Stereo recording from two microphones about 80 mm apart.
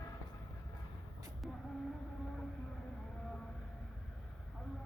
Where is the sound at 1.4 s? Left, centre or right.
Centre.